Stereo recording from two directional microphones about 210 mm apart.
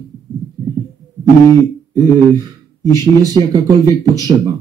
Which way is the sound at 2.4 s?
20° right (ahead or behind).